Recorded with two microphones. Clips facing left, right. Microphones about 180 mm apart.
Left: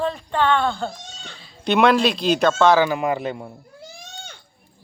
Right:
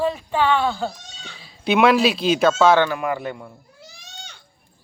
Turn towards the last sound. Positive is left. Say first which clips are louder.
# left 2 dB
turn(degrees=20)  # may be behind; listen again after turning